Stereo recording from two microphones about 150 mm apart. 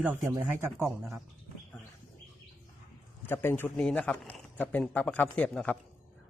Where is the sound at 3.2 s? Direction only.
15° left (ahead or behind).